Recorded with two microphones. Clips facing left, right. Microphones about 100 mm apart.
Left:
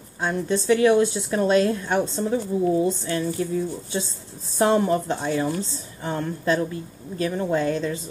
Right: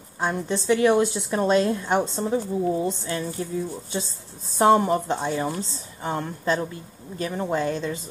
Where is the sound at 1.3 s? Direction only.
25° right (ahead or behind).